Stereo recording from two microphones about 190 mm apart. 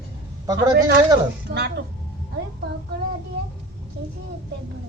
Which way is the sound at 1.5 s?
60° right (ahead or behind).